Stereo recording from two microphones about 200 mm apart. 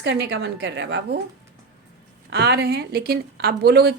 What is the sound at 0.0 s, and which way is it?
A woman's voice, 55° right (ahead or behind).